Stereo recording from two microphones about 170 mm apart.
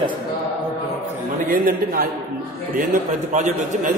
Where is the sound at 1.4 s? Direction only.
55° right (ahead or behind).